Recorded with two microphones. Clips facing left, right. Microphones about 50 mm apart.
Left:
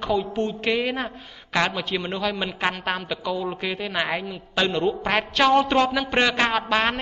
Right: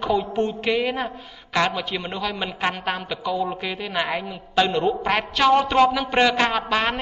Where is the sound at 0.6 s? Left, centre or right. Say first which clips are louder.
Right 1 dB; centre.